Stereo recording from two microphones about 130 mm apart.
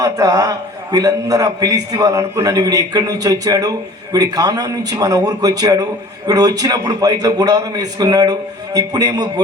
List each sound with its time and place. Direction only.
0.0 s a man's voice: 30° right (ahead or behind)